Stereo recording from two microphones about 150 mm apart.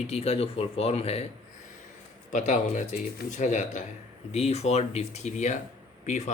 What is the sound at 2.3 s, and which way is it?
Speech, 55° left (ahead or behind).